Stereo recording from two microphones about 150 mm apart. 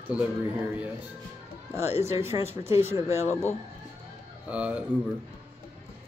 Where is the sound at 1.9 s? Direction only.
15° right (ahead or behind).